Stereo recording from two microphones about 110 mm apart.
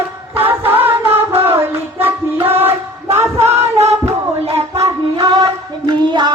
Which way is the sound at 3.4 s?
75° right (ahead or behind).